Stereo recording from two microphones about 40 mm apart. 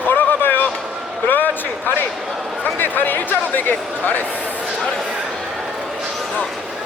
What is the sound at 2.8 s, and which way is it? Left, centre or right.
Speech, left.